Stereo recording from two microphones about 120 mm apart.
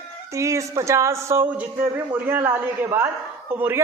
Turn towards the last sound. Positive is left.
turn(degrees=-15)  # may be behind; listen again after turning